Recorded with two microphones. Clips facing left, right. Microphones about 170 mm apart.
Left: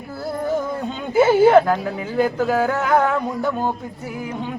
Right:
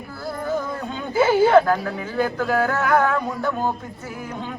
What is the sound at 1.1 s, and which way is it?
Speech, 20° left (ahead or behind).